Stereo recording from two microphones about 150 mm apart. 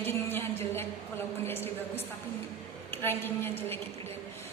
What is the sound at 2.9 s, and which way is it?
Speech, 15° left (ahead or behind).